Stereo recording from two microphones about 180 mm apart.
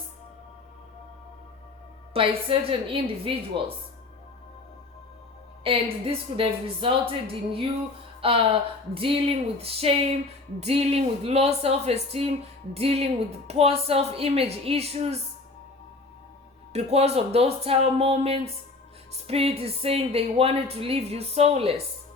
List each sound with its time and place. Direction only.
2.1 s a woman's voice: 30° right (ahead or behind)
5.6 s a woman's voice: 30° right (ahead or behind)
16.7 s speech: 35° right (ahead or behind)